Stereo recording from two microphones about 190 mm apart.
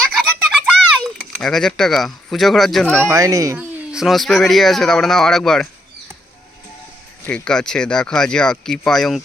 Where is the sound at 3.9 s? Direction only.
Centre (ahead or behind).